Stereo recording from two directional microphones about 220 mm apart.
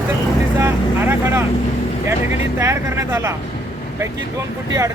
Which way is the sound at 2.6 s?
10° right (ahead or behind).